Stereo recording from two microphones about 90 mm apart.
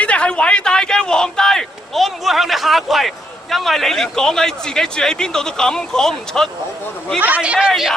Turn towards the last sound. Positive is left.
turn(degrees=0)  # may be behind; listen again after turning